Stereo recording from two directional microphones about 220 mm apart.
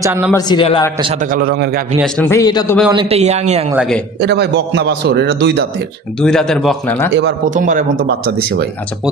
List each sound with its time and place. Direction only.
0.0 s a man's voice: 10° right (ahead or behind)
0.3 s a man's voice: 20° left (ahead or behind)
1.3 s a man's voice: 45° right (ahead or behind)
2.1 s a man's voice: 10° left (ahead or behind)
2.9 s speech: 25° right (ahead or behind)
3.7 s a man's voice: centre (ahead or behind)
4.2 s a man's voice: 50° right (ahead or behind)
6.2 s a man's voice: 5° left (ahead or behind)
7.4 s speech: 35° right (ahead or behind)